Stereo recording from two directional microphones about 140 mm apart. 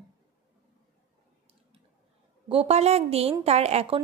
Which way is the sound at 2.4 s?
45° right (ahead or behind).